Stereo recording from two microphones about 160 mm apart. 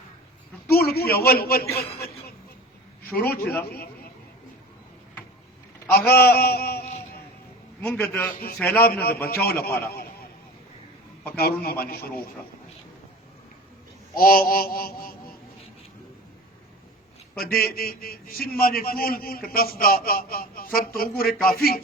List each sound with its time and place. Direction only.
0.7 s a sound: 75° left (ahead or behind)
3.2 s a man's voice: 10° left (ahead or behind)
5.9 s a man's voice: 80° left
7.8 s a man's voice: 10° left (ahead or behind)
8.8 s speech: 80° left
11.3 s a man's voice: 75° left (ahead or behind)
14.2 s a man's voice: 65° left (ahead or behind)
17.4 s a man's voice: 70° left (ahead or behind)